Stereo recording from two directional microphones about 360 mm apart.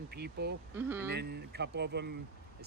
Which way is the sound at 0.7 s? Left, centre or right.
Centre.